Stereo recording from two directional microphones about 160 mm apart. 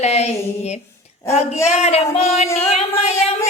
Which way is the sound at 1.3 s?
45° left (ahead or behind).